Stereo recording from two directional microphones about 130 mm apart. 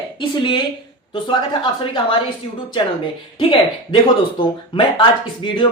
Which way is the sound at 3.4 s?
40° left (ahead or behind).